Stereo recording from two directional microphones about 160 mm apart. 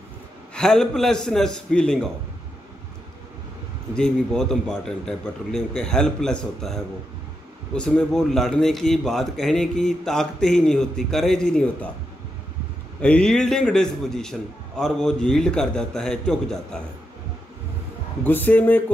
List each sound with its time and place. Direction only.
0.6 s a man's voice: 5° left (ahead or behind)
3.9 s a man's voice: 5° left (ahead or behind)
13.0 s a man's voice: 5° left (ahead or behind)
18.2 s a man's voice: 10° left (ahead or behind)